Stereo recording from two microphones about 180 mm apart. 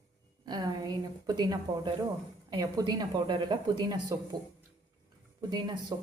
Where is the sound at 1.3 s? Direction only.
25° right (ahead or behind).